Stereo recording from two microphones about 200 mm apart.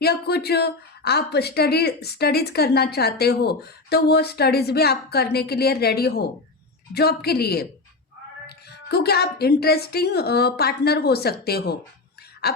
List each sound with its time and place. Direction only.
0.0 s a woman's voice: 55° left (ahead or behind)
12.4 s dog: 50° left (ahead or behind)